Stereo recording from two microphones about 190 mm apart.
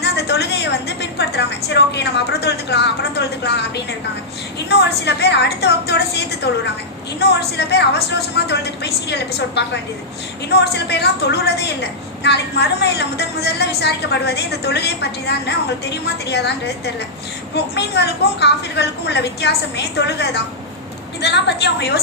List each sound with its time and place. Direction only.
0.0 s a woman's voice: 60° left (ahead or behind)
4.7 s a woman's voice: 60° left (ahead or behind)
7.2 s a woman's voice: 60° left (ahead or behind)